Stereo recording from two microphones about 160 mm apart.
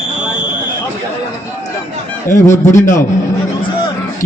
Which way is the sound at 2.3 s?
15° left (ahead or behind).